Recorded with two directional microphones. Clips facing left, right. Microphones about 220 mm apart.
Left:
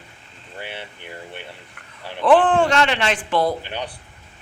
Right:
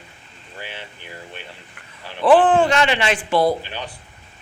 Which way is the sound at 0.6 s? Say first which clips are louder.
Left 2 dB; 25° left (ahead or behind).